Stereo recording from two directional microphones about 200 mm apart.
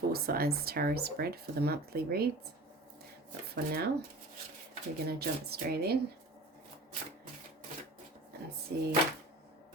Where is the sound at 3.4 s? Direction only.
50° right (ahead or behind).